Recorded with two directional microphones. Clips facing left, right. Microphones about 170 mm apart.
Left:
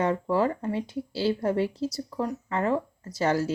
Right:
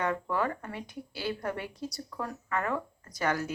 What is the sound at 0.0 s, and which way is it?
Speech, 25° left (ahead or behind).